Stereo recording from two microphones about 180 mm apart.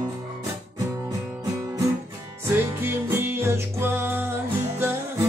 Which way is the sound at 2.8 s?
15° right (ahead or behind).